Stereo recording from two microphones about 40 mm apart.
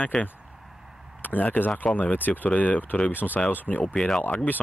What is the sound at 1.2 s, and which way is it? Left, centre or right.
Speech, left.